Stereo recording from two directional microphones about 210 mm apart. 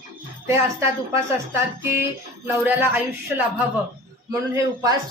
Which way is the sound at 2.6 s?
10° right (ahead or behind).